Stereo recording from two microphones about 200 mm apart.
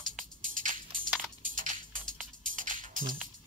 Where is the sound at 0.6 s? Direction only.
40° right (ahead or behind).